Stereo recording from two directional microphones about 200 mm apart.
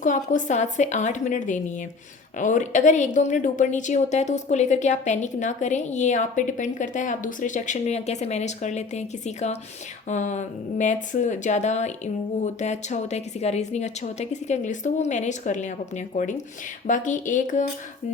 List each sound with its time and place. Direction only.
0.0 s a woman's voice: 40° left (ahead or behind)